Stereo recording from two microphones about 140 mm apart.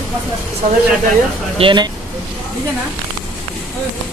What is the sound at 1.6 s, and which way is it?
Speech, 35° right (ahead or behind).